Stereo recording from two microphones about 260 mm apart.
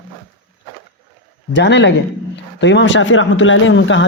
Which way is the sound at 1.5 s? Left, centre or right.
Left.